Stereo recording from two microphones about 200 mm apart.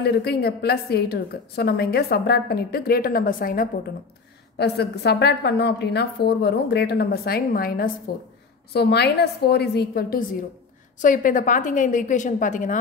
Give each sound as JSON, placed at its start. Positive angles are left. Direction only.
{"t": 0.0, "sound": "a woman's voice", "side_deg": 55}
{"t": 4.6, "sound": "a woman's voice", "side_deg": 55}